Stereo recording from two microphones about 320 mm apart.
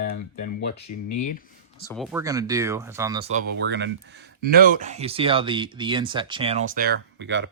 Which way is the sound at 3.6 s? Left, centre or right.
Right.